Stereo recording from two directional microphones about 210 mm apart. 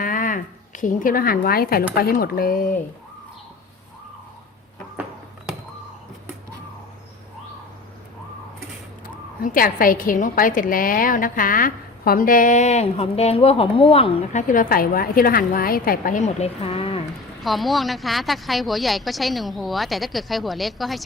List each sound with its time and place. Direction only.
0.0 s speech: 40° left (ahead or behind)
9.0 s a woman's voice: 40° left (ahead or behind)
17.4 s speech: centre (ahead or behind)